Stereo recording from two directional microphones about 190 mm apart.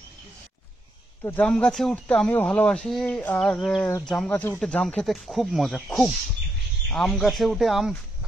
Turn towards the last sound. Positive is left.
turn(degrees=0)  # may be behind; listen again after turning